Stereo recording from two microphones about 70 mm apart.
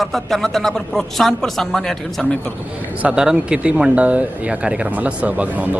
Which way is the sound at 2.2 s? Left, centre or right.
Centre.